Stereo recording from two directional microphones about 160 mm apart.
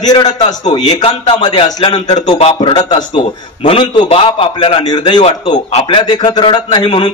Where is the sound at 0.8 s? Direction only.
40° left (ahead or behind).